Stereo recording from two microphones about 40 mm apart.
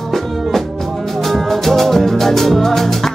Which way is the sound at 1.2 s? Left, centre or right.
Centre.